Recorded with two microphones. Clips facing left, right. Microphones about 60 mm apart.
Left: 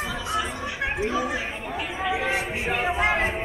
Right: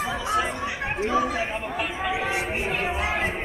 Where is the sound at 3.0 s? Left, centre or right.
Left.